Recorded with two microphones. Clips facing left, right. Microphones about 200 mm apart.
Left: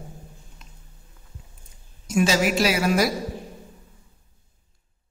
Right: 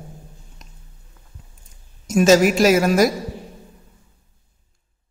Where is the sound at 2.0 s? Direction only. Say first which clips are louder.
Right 7 dB; 45° right (ahead or behind).